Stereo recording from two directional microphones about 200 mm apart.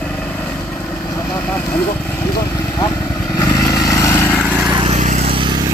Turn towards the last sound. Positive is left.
turn(degrees=-20)  # may be behind; listen again after turning